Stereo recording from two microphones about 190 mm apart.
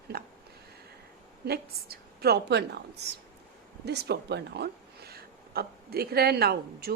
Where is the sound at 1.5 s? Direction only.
55° right (ahead or behind).